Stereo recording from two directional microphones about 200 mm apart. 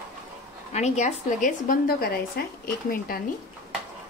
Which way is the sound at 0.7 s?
35° left (ahead or behind).